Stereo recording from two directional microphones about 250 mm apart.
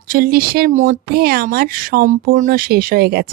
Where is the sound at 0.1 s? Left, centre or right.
Right.